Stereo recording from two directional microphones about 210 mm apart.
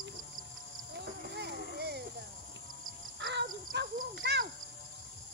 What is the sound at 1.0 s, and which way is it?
Children playing, 50° right (ahead or behind).